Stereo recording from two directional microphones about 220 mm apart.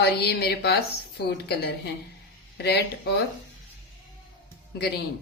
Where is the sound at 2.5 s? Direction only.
50° left (ahead or behind).